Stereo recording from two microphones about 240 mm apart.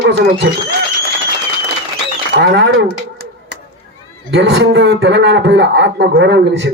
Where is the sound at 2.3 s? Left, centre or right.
Right.